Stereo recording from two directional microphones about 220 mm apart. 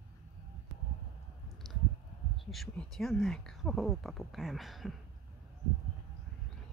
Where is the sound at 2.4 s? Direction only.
Centre (ahead or behind).